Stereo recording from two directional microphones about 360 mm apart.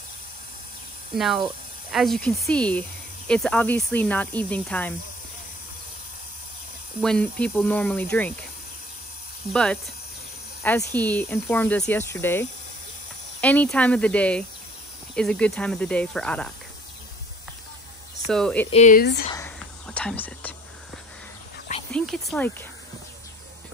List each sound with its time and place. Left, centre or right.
1.1 s speech: centre
7.0 s speech: centre
9.5 s speech: centre
18.2 s speech: centre
18.7 s speech: centre
19.3 s whispering: centre
21.9 s speech: centre